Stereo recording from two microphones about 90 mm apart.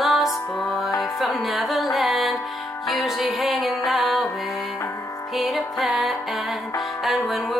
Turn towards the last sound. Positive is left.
turn(degrees=0)  # may be behind; listen again after turning